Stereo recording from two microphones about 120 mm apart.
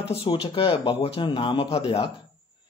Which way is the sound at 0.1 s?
45° left (ahead or behind).